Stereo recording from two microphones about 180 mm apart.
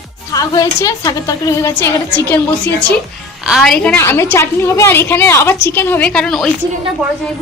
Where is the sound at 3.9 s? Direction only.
15° left (ahead or behind).